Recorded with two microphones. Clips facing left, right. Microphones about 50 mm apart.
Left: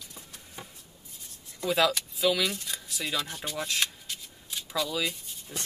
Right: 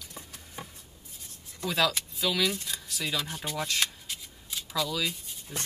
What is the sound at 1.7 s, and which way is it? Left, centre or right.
Speech, centre.